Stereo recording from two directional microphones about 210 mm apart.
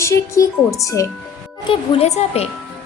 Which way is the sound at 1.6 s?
25° left (ahead or behind).